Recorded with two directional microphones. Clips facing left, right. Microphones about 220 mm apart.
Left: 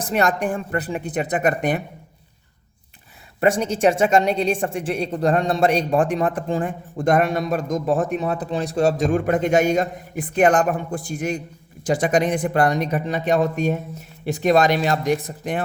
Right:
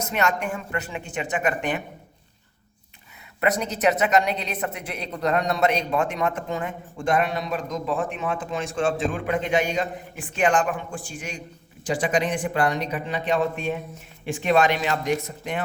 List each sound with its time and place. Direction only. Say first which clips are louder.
0.0 s a woman's voice: left 4 dB; 35° left (ahead or behind)
3.4 s a woman's voice: left 5 dB; 30° left (ahead or behind)